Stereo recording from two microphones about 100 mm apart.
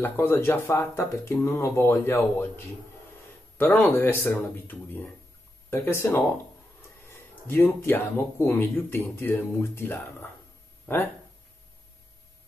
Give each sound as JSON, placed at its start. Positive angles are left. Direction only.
{"t": 0.0, "sound": "speech", "side_deg": 20}